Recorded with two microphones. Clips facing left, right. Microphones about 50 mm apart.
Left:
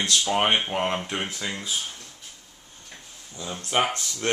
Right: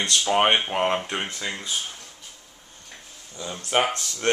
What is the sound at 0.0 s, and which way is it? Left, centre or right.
Speech, centre.